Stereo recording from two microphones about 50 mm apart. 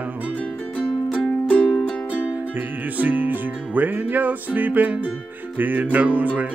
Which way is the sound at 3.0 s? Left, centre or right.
Right.